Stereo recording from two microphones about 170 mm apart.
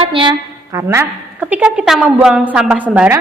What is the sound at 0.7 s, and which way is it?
A woman's voice, 15° right (ahead or behind).